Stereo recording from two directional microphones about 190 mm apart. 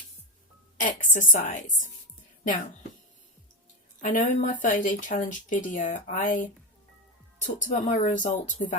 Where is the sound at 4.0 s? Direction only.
40° left (ahead or behind).